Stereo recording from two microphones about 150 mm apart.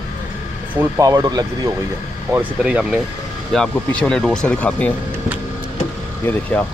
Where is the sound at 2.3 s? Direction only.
10° right (ahead or behind).